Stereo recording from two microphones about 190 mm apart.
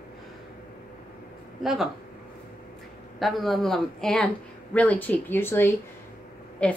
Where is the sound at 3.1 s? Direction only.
Centre (ahead or behind).